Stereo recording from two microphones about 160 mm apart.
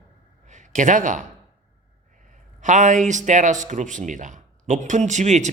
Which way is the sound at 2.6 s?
50° right (ahead or behind).